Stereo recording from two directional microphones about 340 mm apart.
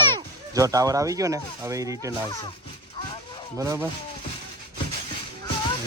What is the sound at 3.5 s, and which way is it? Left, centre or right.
Speech, centre.